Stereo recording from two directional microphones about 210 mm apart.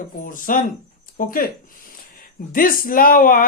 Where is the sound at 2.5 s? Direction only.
40° left (ahead or behind).